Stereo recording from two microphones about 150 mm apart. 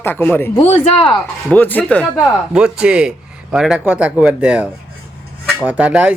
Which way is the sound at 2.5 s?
5° right (ahead or behind).